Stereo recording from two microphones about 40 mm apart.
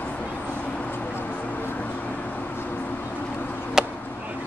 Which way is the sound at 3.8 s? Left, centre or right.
Centre.